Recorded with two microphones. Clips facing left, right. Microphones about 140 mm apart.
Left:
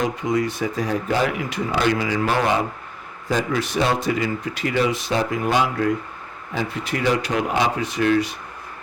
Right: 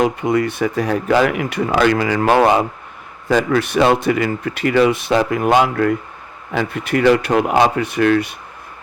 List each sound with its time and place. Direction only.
0.0 s speech: 65° right (ahead or behind)